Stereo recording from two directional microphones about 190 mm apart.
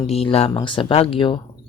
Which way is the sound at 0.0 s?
30° left (ahead or behind).